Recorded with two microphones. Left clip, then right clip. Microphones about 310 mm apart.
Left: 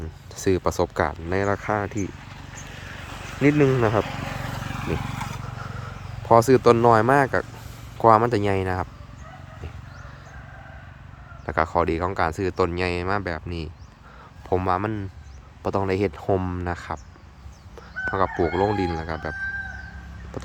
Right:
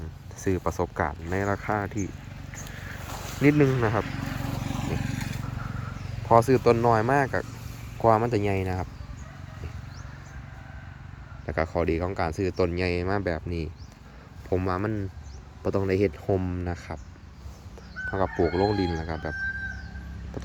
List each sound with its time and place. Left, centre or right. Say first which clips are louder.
0.3 s speech: left 6 dB; centre
3.4 s speech: left 3 dB; centre
3.8 s speech: left 5 dB; left
4.0 s vehicle: left 4 dB; centre
4.6 s vehicle: left 5 dB; left
5.1 s vehicle: left 4 dB; centre
6.4 s speech: left 5 dB; centre
11.4 s speech: left 5 dB; centre
18.1 s speech: left 3 dB; centre